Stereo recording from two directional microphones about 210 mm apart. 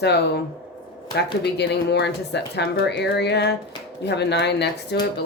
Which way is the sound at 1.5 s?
55° left (ahead or behind).